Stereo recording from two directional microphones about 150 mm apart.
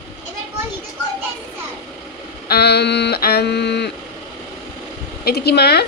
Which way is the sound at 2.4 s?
90° left.